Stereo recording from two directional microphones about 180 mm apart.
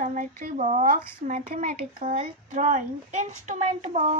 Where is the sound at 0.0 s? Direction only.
45° right (ahead or behind).